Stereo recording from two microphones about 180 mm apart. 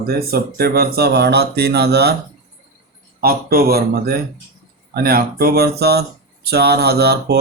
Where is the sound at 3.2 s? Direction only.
55° right (ahead or behind).